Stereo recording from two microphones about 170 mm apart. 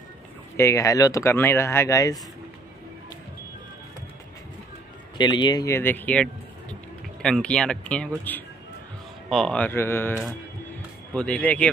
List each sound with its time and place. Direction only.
0.6 s speech: 20° left (ahead or behind)
5.1 s speech: 25° left (ahead or behind)
11.1 s speech: 5° left (ahead or behind)